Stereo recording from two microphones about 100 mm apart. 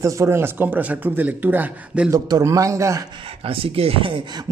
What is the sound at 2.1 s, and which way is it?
Speech, 35° right (ahead or behind).